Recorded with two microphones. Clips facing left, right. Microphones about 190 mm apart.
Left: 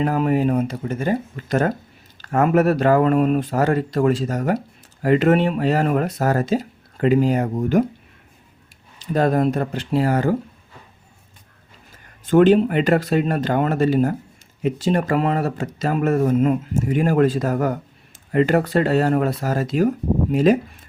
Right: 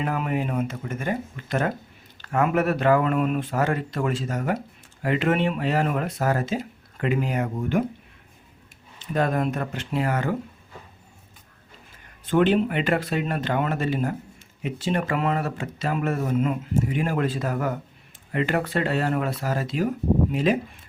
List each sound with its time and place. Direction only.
0.0 s speech: 35° left (ahead or behind)
9.0 s speech: 35° left (ahead or behind)
12.2 s speech: 45° left (ahead or behind)